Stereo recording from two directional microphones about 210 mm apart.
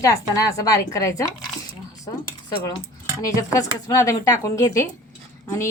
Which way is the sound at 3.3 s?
15° left (ahead or behind).